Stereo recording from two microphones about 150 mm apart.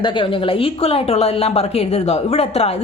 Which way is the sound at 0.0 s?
35° left (ahead or behind).